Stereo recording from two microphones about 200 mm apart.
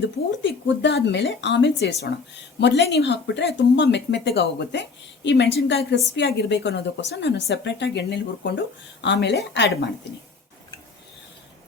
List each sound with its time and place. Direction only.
0.0 s speech: 65° left (ahead or behind)